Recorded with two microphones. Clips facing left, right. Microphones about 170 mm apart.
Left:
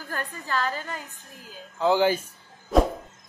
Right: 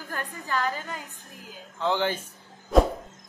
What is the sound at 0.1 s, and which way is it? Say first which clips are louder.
Speech: left 1 dB; 15° right (ahead or behind).